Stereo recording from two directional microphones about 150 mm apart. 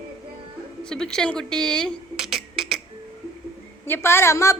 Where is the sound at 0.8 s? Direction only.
5° left (ahead or behind).